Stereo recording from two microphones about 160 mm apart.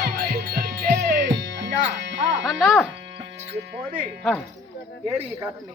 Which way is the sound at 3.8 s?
30° right (ahead or behind).